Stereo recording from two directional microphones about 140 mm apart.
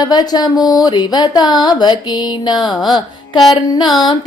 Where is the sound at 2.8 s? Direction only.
30° left (ahead or behind).